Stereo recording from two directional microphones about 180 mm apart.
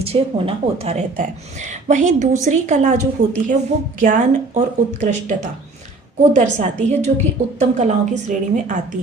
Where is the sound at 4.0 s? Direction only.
45° right (ahead or behind).